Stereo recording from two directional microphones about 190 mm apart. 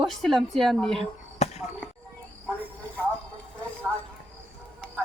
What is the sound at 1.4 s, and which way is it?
Basketball bounce, 35° left (ahead or behind).